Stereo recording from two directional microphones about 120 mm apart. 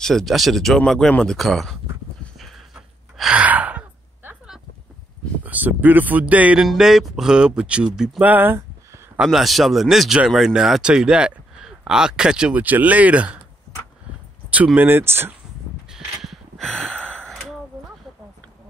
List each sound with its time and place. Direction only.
0.0 s speech: centre (ahead or behind)
2.3 s gasp: centre (ahead or behind)
5.4 s speech: 15° right (ahead or behind)
9.2 s speech: centre (ahead or behind)
14.8 s speech: 15° right (ahead or behind)
15.9 s gasp: centre (ahead or behind)